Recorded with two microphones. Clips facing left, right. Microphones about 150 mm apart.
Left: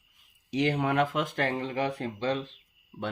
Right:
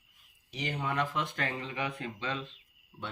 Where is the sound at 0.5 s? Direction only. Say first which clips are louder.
Left 8 dB; 65° left (ahead or behind); by 2.5 s 35° left (ahead or behind).